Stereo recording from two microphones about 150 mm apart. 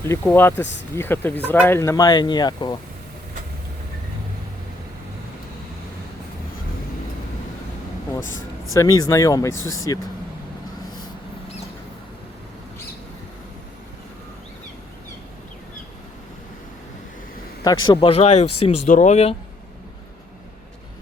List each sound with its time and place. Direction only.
0.3 s speech: 15° left (ahead or behind)
8.7 s speech: 25° left (ahead or behind)
17.6 s a man's voice: 25° left (ahead or behind)
18.0 s speech: 40° left (ahead or behind)